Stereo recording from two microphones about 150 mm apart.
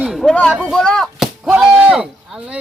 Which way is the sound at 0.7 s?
5° left (ahead or behind).